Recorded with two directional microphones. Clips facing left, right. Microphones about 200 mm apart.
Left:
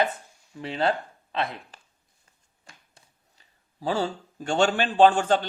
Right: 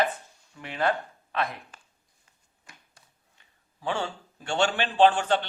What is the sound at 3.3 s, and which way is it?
A man's voice, 35° left (ahead or behind).